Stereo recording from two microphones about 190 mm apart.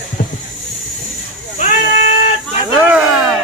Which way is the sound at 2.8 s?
5° right (ahead or behind).